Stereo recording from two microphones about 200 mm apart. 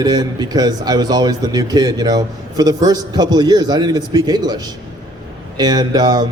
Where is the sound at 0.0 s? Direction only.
20° right (ahead or behind).